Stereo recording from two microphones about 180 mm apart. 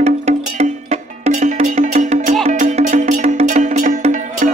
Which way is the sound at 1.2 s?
40° right (ahead or behind).